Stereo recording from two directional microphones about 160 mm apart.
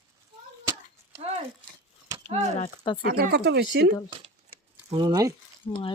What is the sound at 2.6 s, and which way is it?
Speech, 30° left (ahead or behind).